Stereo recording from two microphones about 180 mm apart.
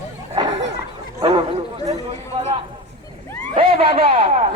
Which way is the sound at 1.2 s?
30° right (ahead or behind).